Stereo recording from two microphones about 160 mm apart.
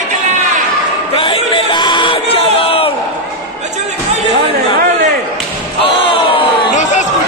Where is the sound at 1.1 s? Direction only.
35° left (ahead or behind).